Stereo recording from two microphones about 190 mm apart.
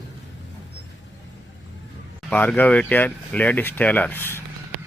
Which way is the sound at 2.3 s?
10° left (ahead or behind).